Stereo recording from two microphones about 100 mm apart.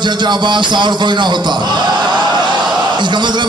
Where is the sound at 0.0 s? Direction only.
50° right (ahead or behind).